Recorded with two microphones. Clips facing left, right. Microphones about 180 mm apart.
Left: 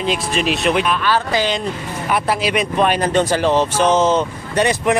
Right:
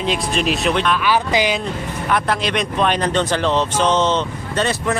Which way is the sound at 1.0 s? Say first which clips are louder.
Even; 15° right (ahead or behind).